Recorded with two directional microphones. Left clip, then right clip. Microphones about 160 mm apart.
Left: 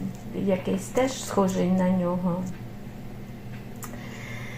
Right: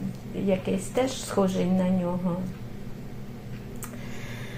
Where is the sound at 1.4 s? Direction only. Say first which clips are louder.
Left 1 dB; 15° left (ahead or behind).